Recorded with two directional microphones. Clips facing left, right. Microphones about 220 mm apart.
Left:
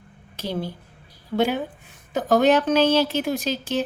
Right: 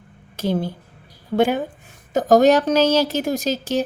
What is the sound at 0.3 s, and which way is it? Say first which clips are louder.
A woman's voice: right 6 dB; 50° right (ahead or behind).